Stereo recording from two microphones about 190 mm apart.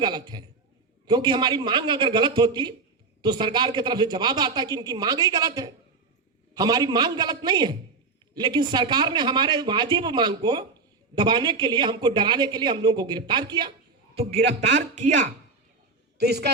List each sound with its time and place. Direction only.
0.0 s speech: 20° right (ahead or behind)
14.6 s speech: 35° right (ahead or behind)
16.1 s speech: 60° right (ahead or behind)